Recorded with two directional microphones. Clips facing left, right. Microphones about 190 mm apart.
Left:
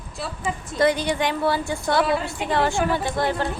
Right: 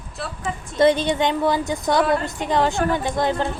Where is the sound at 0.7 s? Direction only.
25° right (ahead or behind).